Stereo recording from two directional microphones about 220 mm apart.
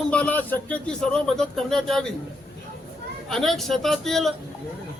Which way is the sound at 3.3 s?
Centre (ahead or behind).